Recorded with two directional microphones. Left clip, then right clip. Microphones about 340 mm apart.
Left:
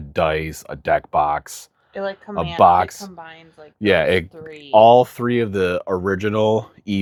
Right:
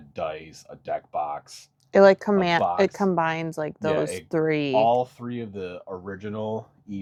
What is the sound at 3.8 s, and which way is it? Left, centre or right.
Speech, left.